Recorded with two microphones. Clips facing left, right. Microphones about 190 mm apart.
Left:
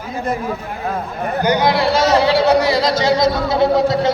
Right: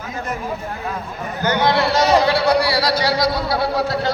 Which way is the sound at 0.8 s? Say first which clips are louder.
Left 5 dB; 55° left (ahead or behind).